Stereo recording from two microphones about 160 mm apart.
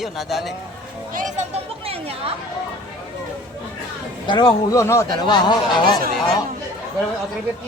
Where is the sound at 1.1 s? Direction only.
55° right (ahead or behind).